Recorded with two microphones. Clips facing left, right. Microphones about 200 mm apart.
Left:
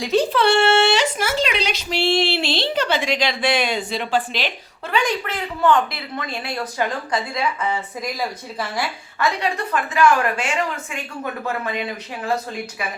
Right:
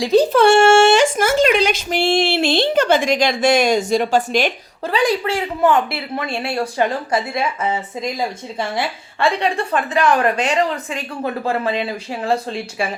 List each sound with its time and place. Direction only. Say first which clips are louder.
0.0 s speech: right 5 dB; 35° right (ahead or behind)
4.9 s a woman's voice: right 5 dB; 35° right (ahead or behind)